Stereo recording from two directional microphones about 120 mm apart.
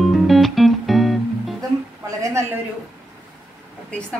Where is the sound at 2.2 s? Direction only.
25° right (ahead or behind).